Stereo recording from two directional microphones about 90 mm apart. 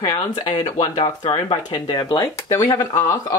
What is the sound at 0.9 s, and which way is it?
Speech, 65° left (ahead or behind).